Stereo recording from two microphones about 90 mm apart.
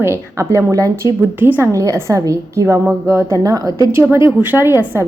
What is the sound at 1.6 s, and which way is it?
A woman's voice, 35° right (ahead or behind).